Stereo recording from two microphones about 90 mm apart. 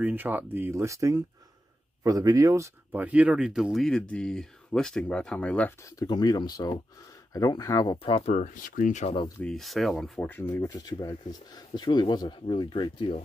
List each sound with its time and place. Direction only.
0.0 s speech: 20° right (ahead or behind)
2.9 s speech: 15° right (ahead or behind); by 5.8 s 15° left (ahead or behind)
5.8 s speech: 35° left (ahead or behind)
6.0 s speech: 50° left (ahead or behind)
9.4 s speech: 5° left (ahead or behind)
10.2 s speech: 20° left (ahead or behind)
10.7 s speech: 45° left (ahead or behind)